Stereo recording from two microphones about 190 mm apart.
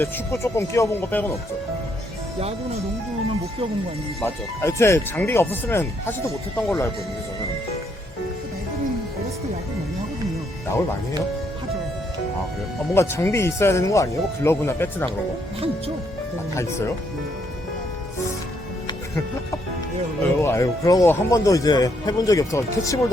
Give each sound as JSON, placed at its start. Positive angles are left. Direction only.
{"t": 0.0, "sound": "speech", "side_deg": 15}
{"t": 4.2, "sound": "speech", "side_deg": 15}
{"t": 12.9, "sound": "speech", "side_deg": 15}
{"t": 20.4, "sound": "speech", "side_deg": 15}